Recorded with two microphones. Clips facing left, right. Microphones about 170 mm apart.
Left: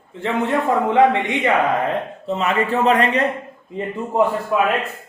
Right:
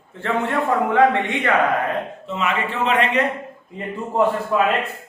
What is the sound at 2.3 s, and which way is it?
Speech, 35° left (ahead or behind).